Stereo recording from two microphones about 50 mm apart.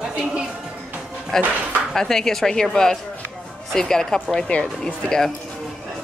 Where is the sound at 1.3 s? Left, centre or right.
Centre.